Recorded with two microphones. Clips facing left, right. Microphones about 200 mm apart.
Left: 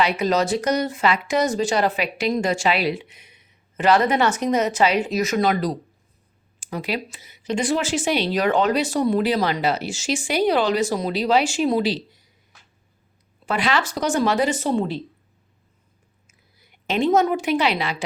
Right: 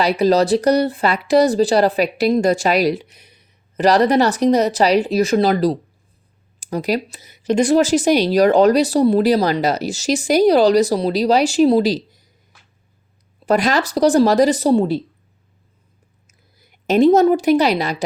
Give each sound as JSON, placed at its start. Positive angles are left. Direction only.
{"t": 0.0, "sound": "speech", "side_deg": -35}
{"t": 13.4, "sound": "speech", "side_deg": -40}
{"t": 16.2, "sound": "a sound", "side_deg": -40}